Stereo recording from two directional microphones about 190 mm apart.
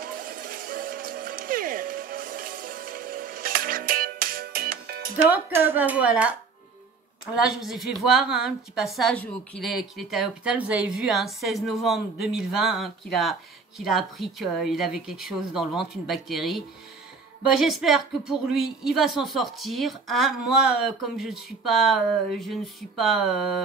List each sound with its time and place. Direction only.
0.0 s music: 50° right (ahead or behind)
5.1 s speech: 10° right (ahead or behind)
7.4 s a woman's voice: centre (ahead or behind)